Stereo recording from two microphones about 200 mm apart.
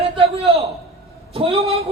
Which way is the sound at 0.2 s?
30° right (ahead or behind).